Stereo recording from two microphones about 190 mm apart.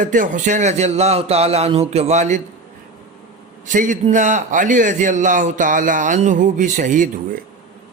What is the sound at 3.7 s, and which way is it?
A man's voice, 40° right (ahead or behind).